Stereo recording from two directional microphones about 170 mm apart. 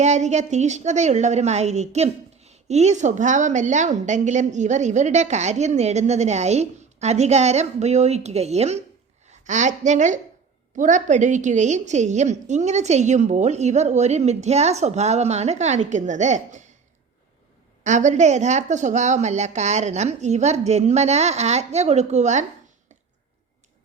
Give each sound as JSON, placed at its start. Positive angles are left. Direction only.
{"t": 0.0, "sound": "a woman's voice", "side_deg": -40}
{"t": 17.8, "sound": "a woman's voice", "side_deg": -45}